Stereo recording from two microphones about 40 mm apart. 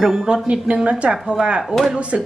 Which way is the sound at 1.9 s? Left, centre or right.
Right.